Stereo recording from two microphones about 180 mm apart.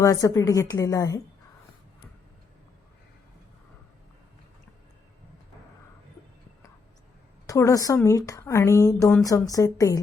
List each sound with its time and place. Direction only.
0.0 s a woman's voice: 20° left (ahead or behind)
7.4 s a woman's voice: 20° left (ahead or behind)